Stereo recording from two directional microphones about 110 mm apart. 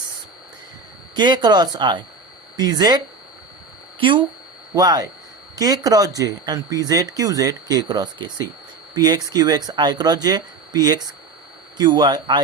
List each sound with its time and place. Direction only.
1.1 s speech: 40° right (ahead or behind)
4.0 s speech: 50° right (ahead or behind)
4.7 s speech: 35° right (ahead or behind)